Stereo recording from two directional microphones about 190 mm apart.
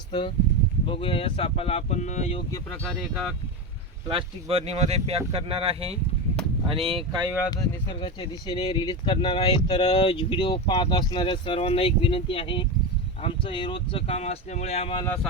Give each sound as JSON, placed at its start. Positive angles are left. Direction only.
{"t": 0.1, "sound": "speech", "side_deg": 25}
{"t": 2.6, "sound": "speech", "side_deg": 5}
{"t": 4.1, "sound": "speech", "side_deg": -30}
{"t": 7.5, "sound": "speech", "side_deg": 25}